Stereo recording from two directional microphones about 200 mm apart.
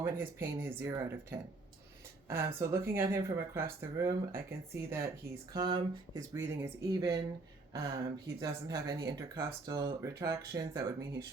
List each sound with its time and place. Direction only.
0.0 s speech: 10° right (ahead or behind)